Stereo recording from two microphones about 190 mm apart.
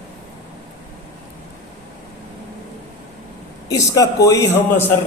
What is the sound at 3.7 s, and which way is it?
Speech, 20° left (ahead or behind).